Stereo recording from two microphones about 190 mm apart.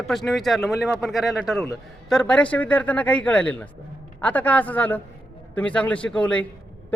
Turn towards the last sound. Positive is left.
turn(degrees=5)  # may be behind; listen again after turning